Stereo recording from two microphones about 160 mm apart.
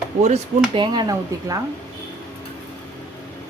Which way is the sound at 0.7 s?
30° right (ahead or behind).